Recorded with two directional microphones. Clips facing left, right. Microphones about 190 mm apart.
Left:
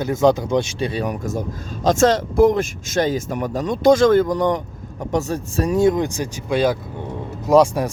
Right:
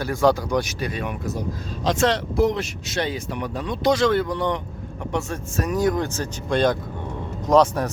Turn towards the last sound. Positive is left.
turn(degrees=10)  # may be behind; listen again after turning